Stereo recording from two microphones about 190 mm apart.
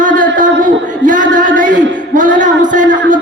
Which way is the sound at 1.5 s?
45° right (ahead or behind).